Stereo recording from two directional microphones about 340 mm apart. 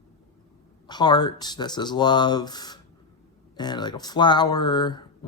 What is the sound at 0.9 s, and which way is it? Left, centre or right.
A man's voice, centre.